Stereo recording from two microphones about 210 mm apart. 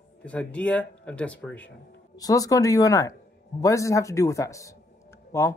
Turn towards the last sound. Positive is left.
turn(degrees=15)  # may be behind; listen again after turning